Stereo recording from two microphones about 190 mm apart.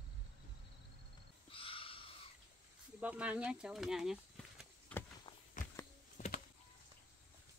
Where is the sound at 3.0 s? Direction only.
5° right (ahead or behind).